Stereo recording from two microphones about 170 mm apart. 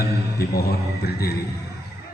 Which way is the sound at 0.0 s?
65° left (ahead or behind).